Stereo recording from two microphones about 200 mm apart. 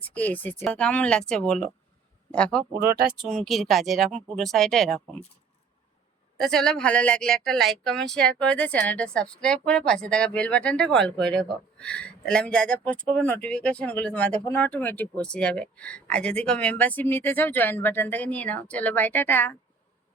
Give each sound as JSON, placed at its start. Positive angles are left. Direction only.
{"t": 0.0, "sound": "speech", "side_deg": 10}
{"t": 2.8, "sound": "speech", "side_deg": -50}
{"t": 3.2, "sound": "speech", "side_deg": 0}
{"t": 6.3, "sound": "speech", "side_deg": 5}